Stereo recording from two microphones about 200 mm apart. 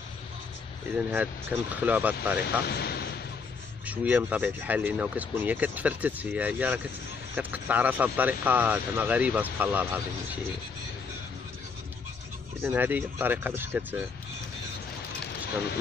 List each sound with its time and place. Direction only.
1.1 s speech: 10° right (ahead or behind)
2.4 s speech: 55° left (ahead or behind)
3.8 s speech: 5° right (ahead or behind)
12.6 s speech: 10° right (ahead or behind)